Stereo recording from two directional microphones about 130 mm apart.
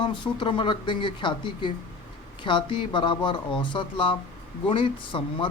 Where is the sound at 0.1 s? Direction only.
40° left (ahead or behind).